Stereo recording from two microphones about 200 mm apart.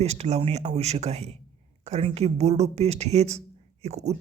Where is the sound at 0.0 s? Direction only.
30° right (ahead or behind).